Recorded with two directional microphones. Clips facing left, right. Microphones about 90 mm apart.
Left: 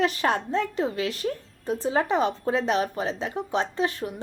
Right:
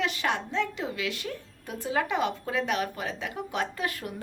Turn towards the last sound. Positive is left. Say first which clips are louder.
# left 5 dB
turn(degrees=25)  # may be behind; listen again after turning